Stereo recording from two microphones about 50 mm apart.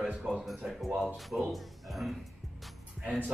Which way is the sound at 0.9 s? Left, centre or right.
Right.